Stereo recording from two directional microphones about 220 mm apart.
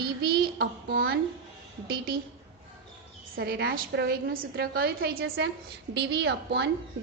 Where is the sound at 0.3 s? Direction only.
45° right (ahead or behind).